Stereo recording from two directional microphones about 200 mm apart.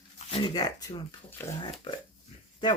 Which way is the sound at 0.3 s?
25° left (ahead or behind).